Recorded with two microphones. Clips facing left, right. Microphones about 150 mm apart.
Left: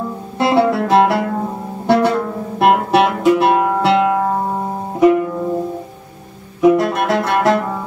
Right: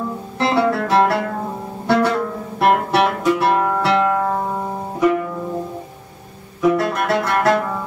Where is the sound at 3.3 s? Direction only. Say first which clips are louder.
Left 4 dB; 20° left (ahead or behind).